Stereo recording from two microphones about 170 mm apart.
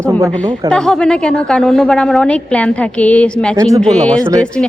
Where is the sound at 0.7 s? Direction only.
5° left (ahead or behind).